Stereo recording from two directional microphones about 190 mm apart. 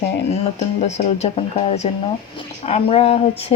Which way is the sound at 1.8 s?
30° left (ahead or behind).